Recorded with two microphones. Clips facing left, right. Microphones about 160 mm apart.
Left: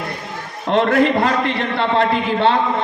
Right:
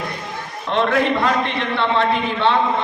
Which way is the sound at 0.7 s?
40° left (ahead or behind).